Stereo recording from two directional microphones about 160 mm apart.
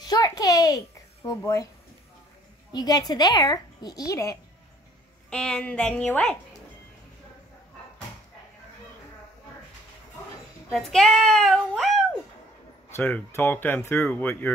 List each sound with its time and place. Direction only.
0.0 s a sound: 25° left (ahead or behind)
2.7 s a woman's voice: 25° left (ahead or behind)
5.3 s speech: 5° left (ahead or behind)
10.7 s speech: centre (ahead or behind)
12.9 s speech: 15° left (ahead or behind)